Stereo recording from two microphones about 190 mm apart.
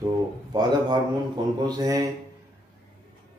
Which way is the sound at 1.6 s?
20° right (ahead or behind).